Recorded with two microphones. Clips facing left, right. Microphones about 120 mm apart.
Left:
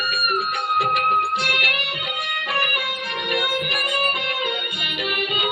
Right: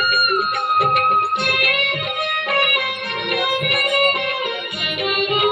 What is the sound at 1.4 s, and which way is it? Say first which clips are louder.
Music: right 4 dB; 55° right (ahead or behind).